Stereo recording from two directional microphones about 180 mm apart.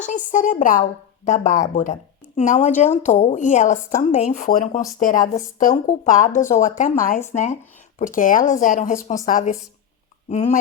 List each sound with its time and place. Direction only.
0.0 s a woman's voice: 45° left (ahead or behind)